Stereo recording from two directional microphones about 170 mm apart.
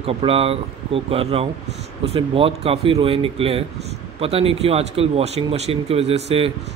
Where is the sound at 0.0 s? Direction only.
35° right (ahead or behind).